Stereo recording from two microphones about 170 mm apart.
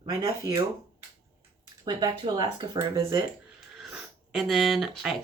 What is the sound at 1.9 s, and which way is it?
Speech, 25° right (ahead or behind).